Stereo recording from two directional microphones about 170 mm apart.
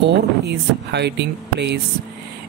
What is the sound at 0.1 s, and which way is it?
Speech, 80° right.